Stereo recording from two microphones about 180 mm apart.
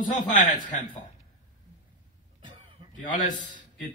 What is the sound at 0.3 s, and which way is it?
Speech, 45° left (ahead or behind).